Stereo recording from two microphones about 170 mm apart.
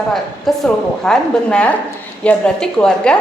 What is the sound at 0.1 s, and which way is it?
A woman's voice, centre (ahead or behind).